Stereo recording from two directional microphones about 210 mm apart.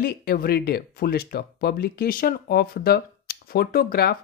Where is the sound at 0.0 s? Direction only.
45° left (ahead or behind).